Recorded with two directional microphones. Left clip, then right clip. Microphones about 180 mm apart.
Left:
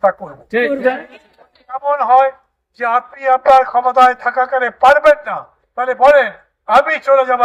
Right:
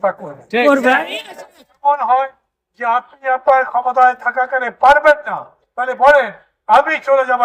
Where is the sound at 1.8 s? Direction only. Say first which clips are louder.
Left 3 dB; 15° left (ahead or behind).